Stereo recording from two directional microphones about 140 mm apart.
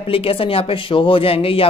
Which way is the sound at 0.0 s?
40° left (ahead or behind).